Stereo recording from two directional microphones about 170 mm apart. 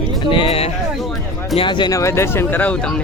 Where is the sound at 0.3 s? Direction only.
30° left (ahead or behind).